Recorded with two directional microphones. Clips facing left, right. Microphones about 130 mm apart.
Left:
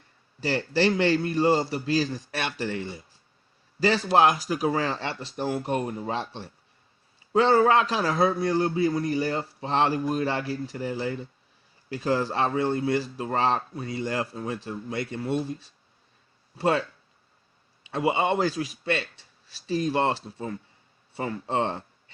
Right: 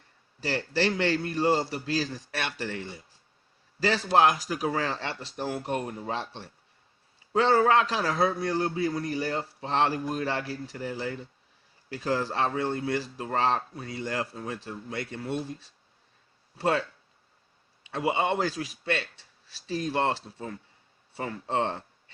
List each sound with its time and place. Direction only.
0.8 s a man's voice: 15° left (ahead or behind)
2.3 s speech: 20° left (ahead or behind)
3.8 s a man's voice: 5° left (ahead or behind)
4.4 s a man's voice: 20° left (ahead or behind)
7.3 s a man's voice: 10° left (ahead or behind)
16.6 s a man's voice: 10° left (ahead or behind)
17.9 s a man's voice: 15° left (ahead or behind)
19.9 s a man's voice: 15° left (ahead or behind)